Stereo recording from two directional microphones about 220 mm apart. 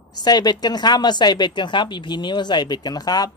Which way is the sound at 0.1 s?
20° left (ahead or behind).